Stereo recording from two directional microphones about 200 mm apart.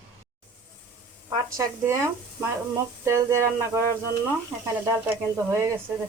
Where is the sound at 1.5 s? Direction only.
15° right (ahead or behind).